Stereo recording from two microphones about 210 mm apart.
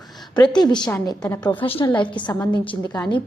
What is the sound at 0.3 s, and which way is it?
A woman's voice, 20° left (ahead or behind).